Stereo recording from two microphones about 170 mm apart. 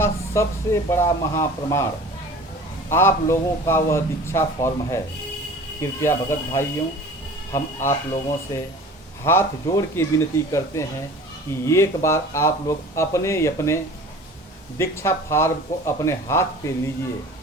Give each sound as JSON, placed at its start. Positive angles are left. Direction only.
{"t": 0.0, "sound": "speech", "side_deg": 15}
{"t": 2.9, "sound": "speech", "side_deg": 15}
{"t": 9.2, "sound": "speech", "side_deg": 15}
{"t": 14.8, "sound": "speech", "side_deg": 15}